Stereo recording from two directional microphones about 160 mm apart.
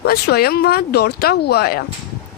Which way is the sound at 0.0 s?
75° left (ahead or behind).